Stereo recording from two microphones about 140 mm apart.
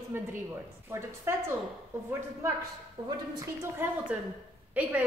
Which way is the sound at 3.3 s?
15° right (ahead or behind).